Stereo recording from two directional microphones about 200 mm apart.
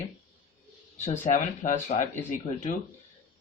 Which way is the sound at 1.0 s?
40° left (ahead or behind).